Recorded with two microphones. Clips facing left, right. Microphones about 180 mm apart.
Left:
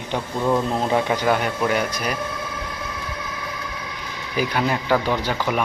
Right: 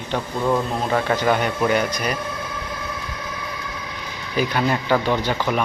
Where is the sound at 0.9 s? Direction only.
15° left (ahead or behind).